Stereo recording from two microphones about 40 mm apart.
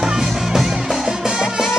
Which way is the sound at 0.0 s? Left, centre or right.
Centre.